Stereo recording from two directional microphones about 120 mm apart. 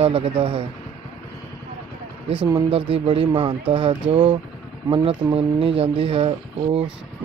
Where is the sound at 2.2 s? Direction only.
45° right (ahead or behind).